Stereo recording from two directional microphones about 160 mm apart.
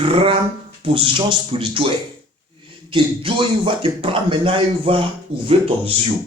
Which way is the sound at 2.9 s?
35° right (ahead or behind).